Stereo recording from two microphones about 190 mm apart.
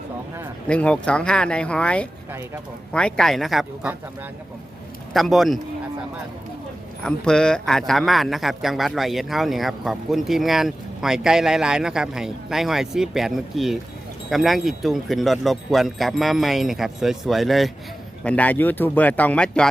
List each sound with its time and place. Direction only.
0.7 s a man's voice: 5° left (ahead or behind)
5.1 s a man's voice: centre (ahead or behind)
7.0 s a man's voice: 5° left (ahead or behind)